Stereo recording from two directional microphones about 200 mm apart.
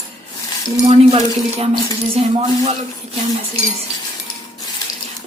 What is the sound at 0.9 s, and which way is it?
Speech, 30° right (ahead or behind).